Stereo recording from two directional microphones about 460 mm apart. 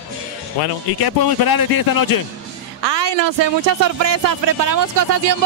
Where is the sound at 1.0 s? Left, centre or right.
Left.